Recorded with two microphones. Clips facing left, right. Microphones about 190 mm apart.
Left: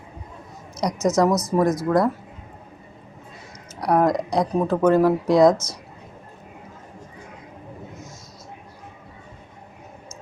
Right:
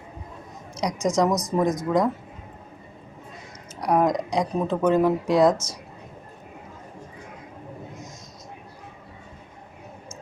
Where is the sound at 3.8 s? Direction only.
10° right (ahead or behind).